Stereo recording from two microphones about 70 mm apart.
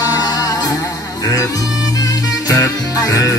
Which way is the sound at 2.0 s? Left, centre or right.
Left.